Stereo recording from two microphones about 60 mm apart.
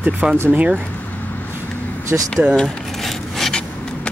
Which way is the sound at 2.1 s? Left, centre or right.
Right.